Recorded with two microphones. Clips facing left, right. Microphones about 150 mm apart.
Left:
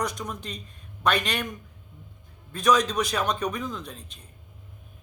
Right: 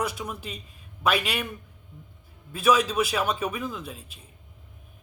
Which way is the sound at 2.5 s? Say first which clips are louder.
Even; 5° right (ahead or behind).